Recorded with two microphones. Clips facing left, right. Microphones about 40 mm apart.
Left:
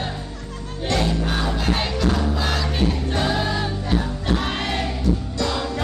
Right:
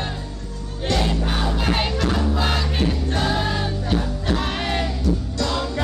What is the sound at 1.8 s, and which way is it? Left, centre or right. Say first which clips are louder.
Music: even; centre.